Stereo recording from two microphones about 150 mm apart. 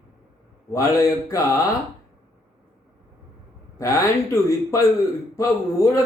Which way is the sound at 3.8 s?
20° left (ahead or behind).